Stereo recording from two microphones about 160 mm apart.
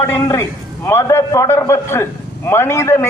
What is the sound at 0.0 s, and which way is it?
A man's voice, 20° left (ahead or behind).